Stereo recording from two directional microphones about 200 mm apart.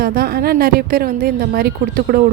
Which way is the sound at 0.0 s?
50° right (ahead or behind).